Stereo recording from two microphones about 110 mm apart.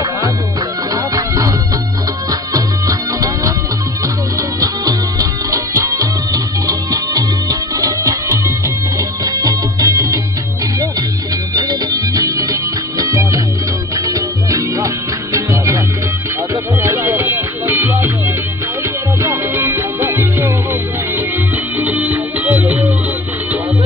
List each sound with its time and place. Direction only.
1.1 s music: 30° right (ahead or behind)
2.5 s music: 35° right (ahead or behind)
11.5 s music: 40° right (ahead or behind)
16.8 s music: 25° right (ahead or behind)
21.7 s music: 15° right (ahead or behind)